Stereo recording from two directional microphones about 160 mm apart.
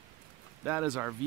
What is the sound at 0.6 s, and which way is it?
Speech, 10° right (ahead or behind).